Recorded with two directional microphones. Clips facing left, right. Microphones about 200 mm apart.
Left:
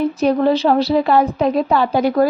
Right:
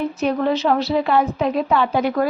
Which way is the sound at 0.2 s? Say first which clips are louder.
Left 4 dB; 35° left (ahead or behind).